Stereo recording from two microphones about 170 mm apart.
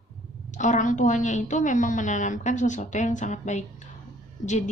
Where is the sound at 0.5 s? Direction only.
45° left (ahead or behind).